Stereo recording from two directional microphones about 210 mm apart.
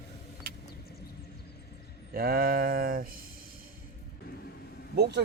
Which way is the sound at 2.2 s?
45° right (ahead or behind).